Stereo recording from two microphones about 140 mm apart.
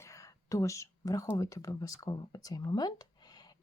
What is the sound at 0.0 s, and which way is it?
Speech, 20° left (ahead or behind).